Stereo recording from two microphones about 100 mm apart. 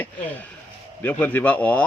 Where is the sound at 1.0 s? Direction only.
20° left (ahead or behind).